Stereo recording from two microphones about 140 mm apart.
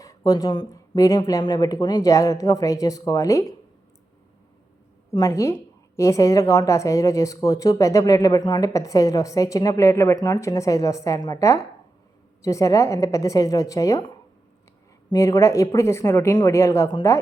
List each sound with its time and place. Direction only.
0.0 s speech: 25° left (ahead or behind)
5.1 s speech: 25° left (ahead or behind)
15.1 s speech: 25° left (ahead or behind)